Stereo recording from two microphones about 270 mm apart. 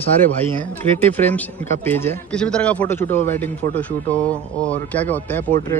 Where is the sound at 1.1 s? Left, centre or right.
Centre.